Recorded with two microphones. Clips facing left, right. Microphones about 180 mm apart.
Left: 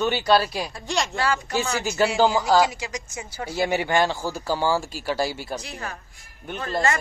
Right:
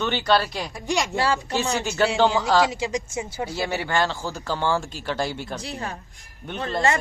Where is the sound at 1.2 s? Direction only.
30° right (ahead or behind).